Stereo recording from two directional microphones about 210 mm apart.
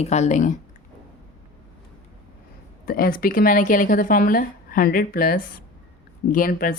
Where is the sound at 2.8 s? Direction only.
45° left (ahead or behind).